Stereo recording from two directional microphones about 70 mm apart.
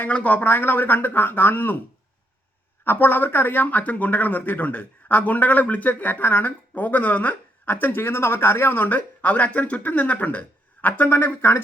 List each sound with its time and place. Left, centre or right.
0.0 s speech: left
2.8 s speech: left